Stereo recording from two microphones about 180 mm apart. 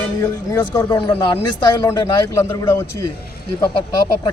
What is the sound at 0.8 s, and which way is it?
A man's voice, 30° left (ahead or behind).